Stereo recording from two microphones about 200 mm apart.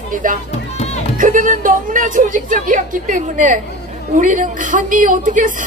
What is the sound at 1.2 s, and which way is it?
A woman's voice, 40° right (ahead or behind).